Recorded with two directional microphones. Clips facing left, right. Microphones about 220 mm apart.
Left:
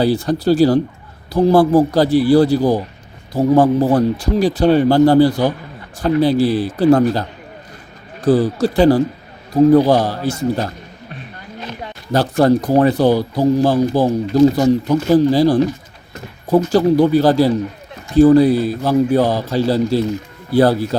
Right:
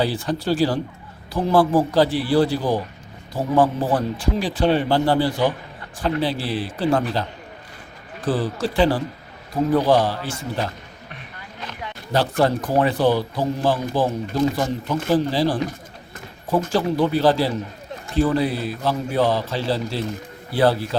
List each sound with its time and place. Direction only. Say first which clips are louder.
0.0 s speech: left 7 dB; 40° left (ahead or behind)
11.8 s a man's voice: left 4 dB; 40° left (ahead or behind)